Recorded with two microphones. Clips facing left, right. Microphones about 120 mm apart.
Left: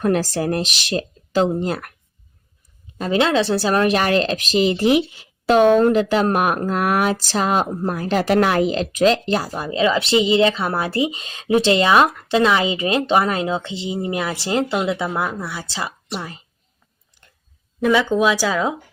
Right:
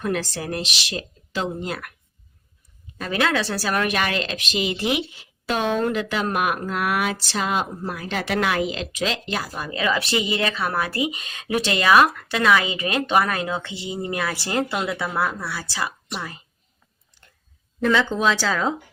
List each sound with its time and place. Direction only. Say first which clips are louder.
0.0 s speech: left 7 dB; 40° left (ahead or behind)
3.0 s speech: left 5 dB; 25° left (ahead or behind)
17.7 s speech: left 4 dB; 10° left (ahead or behind)